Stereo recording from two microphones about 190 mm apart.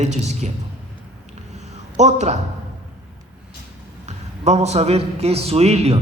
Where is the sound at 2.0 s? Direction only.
35° right (ahead or behind).